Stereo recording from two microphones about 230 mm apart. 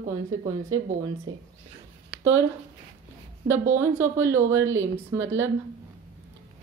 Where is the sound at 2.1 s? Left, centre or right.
Centre.